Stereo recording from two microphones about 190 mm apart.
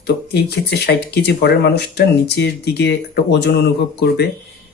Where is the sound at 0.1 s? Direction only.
60° left (ahead or behind).